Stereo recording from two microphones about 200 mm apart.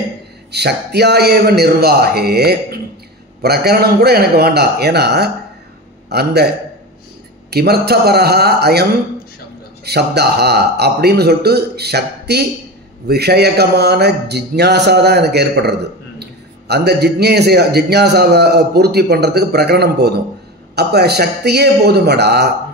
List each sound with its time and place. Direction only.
0.5 s a man's voice: 55° right (ahead or behind)
7.5 s a man's voice: 50° right (ahead or behind)
9.8 s a man's voice: 55° right (ahead or behind)